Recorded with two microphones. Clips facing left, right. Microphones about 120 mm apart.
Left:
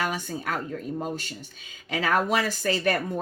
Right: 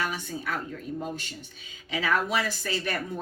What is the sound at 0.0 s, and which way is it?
A woman's voice, 45° left (ahead or behind).